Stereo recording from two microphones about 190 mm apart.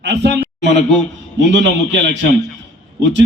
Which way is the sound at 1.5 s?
70° right (ahead or behind).